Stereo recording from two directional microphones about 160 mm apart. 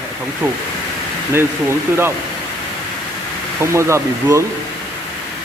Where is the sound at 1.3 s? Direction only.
15° right (ahead or behind).